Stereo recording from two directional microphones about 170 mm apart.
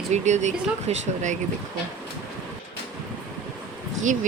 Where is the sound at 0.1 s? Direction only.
45° right (ahead or behind).